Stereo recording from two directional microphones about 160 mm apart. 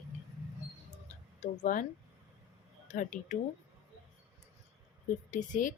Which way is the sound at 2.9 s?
50° left (ahead or behind).